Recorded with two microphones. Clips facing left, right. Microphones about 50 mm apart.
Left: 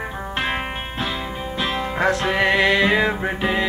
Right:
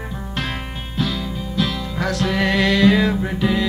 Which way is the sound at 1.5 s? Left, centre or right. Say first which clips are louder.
Even; left.